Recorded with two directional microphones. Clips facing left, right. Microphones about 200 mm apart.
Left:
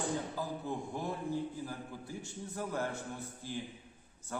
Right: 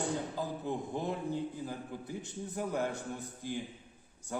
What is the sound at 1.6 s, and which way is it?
A man's voice, 20° right (ahead or behind).